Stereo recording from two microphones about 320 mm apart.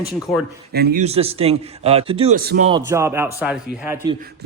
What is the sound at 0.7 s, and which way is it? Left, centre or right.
Speech, right.